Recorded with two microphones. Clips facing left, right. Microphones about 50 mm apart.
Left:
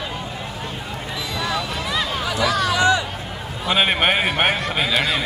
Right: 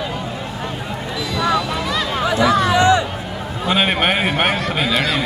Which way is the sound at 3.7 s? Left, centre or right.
Centre.